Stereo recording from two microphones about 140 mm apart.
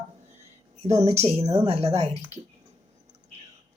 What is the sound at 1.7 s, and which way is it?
Speech, 45° right (ahead or behind).